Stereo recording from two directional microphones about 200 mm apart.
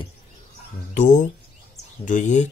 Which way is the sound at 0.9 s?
40° left (ahead or behind).